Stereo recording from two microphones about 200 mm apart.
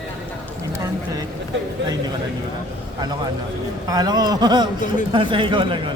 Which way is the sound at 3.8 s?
20° right (ahead or behind).